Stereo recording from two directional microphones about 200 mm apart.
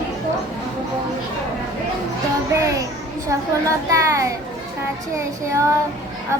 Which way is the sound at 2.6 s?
15° right (ahead or behind).